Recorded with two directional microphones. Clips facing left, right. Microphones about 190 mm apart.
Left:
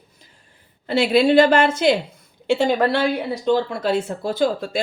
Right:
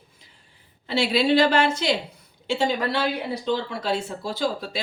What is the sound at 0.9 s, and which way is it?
Speech, 50° left (ahead or behind).